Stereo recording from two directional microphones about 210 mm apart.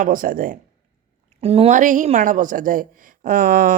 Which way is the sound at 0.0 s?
40° right (ahead or behind).